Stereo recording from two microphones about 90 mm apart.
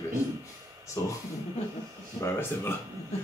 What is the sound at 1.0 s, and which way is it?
Speech, 40° left (ahead or behind).